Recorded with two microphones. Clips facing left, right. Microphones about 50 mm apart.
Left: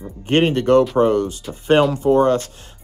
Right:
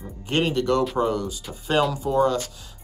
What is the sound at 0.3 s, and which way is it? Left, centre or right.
Speech, left.